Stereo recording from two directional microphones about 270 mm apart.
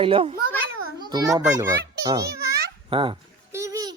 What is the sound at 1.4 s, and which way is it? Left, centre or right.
Speech, centre.